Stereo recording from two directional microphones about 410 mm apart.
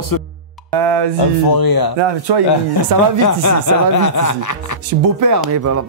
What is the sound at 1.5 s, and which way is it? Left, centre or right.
Speech, left.